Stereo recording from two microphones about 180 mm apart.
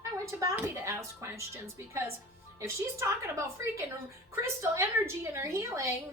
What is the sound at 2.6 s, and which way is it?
A woman's voice, 15° right (ahead or behind).